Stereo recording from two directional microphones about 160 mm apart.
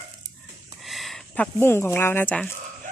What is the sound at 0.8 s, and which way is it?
Speech, centre (ahead or behind).